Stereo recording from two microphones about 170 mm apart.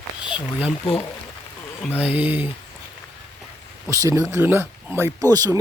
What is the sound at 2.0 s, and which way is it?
Speech, 10° right (ahead or behind).